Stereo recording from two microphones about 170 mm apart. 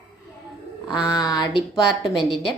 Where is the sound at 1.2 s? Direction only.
20° left (ahead or behind).